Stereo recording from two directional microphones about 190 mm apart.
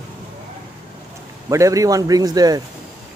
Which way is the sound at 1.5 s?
15° right (ahead or behind).